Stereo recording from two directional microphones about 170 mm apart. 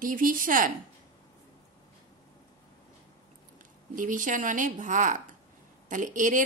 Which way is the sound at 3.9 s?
50° right (ahead or behind).